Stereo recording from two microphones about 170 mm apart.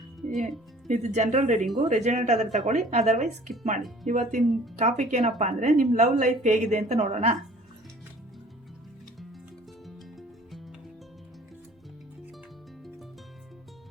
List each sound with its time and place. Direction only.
0.3 s speech: centre (ahead or behind)
0.9 s a woman's voice: 40° right (ahead or behind)